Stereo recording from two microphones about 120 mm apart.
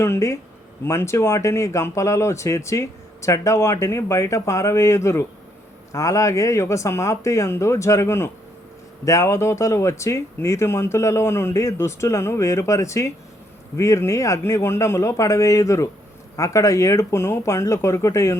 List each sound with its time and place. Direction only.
0.0 s speech: 25° left (ahead or behind)